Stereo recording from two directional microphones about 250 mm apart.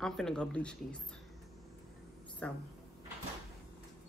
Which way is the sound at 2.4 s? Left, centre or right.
Centre.